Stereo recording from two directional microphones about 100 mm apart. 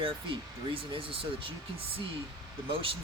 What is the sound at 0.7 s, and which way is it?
Speech, 65° right (ahead or behind).